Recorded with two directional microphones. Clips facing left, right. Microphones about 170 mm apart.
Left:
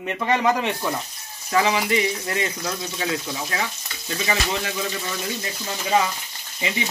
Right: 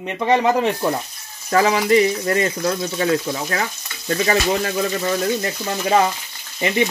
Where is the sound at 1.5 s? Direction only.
45° right (ahead or behind).